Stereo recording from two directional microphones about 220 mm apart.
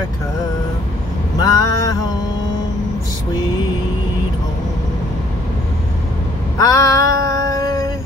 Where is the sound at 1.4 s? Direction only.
15° left (ahead or behind).